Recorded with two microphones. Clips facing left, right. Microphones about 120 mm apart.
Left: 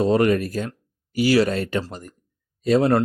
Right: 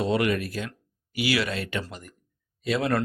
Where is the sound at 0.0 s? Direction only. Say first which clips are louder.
Left 6 dB; 40° left (ahead or behind).